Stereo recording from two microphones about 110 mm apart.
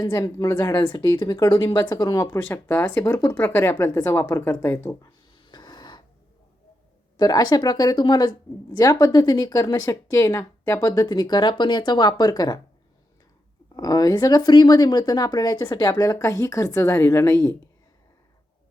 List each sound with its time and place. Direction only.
0.0 s speech: 35° left (ahead or behind)
5.3 s a sound: 45° left (ahead or behind)
7.2 s speech: 35° left (ahead or behind)
13.7 s speech: 35° left (ahead or behind)